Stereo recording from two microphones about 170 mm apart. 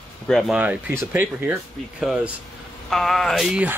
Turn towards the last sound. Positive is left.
turn(degrees=-5)  # may be behind; listen again after turning